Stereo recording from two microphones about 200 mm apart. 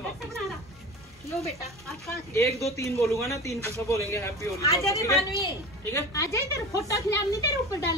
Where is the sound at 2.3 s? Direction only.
15° left (ahead or behind).